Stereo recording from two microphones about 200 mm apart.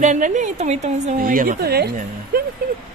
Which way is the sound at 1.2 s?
45° right (ahead or behind).